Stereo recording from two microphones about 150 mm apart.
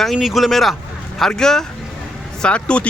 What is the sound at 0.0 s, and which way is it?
Speech, centre (ahead or behind).